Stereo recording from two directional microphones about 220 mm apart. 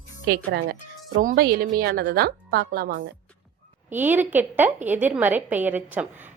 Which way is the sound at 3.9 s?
10° right (ahead or behind).